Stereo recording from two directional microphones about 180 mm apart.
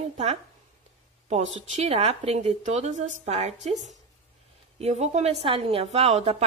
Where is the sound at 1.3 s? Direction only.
40° right (ahead or behind).